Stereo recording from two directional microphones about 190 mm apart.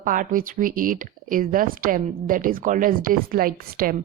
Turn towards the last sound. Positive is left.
turn(degrees=-50)  # may be behind; listen again after turning